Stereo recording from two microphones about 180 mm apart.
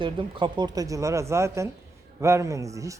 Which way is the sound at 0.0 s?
25° right (ahead or behind).